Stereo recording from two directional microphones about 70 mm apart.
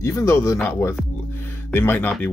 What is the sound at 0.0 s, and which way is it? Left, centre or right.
Speech, left.